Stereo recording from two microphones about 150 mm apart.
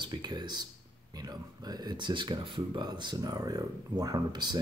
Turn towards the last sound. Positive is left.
turn(degrees=-25)  # may be behind; listen again after turning